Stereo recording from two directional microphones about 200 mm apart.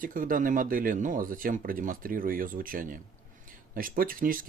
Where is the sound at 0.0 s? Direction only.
45° right (ahead or behind).